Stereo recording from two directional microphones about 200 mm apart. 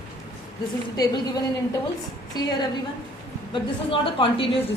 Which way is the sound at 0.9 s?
20° left (ahead or behind).